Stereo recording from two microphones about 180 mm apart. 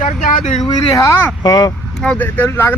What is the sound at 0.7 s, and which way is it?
Speech, 15° left (ahead or behind).